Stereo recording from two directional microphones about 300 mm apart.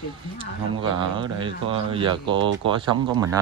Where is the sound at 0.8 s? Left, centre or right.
Centre.